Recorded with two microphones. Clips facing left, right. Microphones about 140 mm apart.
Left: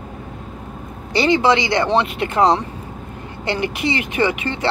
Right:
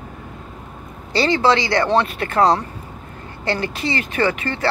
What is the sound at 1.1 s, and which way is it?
Speech, 15° left (ahead or behind).